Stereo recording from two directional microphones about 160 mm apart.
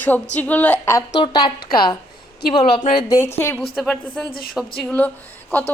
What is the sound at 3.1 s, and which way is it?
Speech, 15° left (ahead or behind).